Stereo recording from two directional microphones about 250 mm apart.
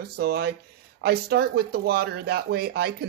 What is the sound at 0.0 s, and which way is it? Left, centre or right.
Speech, right.